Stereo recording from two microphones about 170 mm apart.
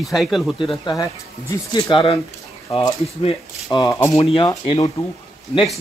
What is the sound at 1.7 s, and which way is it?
Speech, 30° left (ahead or behind).